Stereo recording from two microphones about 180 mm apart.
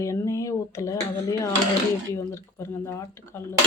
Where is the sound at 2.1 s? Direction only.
15° left (ahead or behind).